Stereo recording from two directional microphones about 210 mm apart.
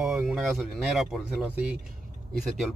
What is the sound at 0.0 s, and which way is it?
A man's voice, 5° right (ahead or behind).